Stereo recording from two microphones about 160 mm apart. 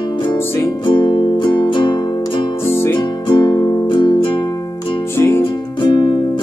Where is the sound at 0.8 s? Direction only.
30° left (ahead or behind).